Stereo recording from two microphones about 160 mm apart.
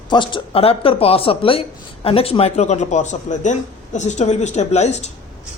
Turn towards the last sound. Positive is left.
turn(degrees=45)  # may be behind; listen again after turning